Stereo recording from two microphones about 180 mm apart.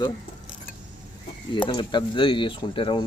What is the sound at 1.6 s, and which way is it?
Speech, 25° left (ahead or behind).